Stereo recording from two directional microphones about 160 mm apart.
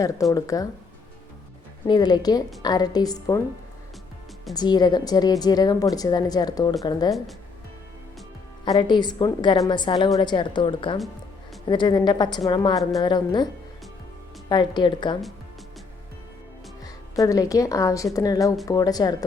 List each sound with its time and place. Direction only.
0.0 s a woman's voice: 20° left (ahead or behind)
1.9 s a woman's voice: 25° left (ahead or behind)
4.5 s a woman's voice: 25° left (ahead or behind)
8.6 s a woman's voice: 30° left (ahead or behind)
14.5 s a woman's voice: 25° left (ahead or behind)
16.8 s a woman's voice: 20° left (ahead or behind)